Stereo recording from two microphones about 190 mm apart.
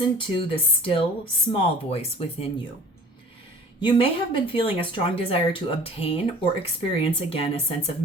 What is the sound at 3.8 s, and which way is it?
Speech, 25° left (ahead or behind).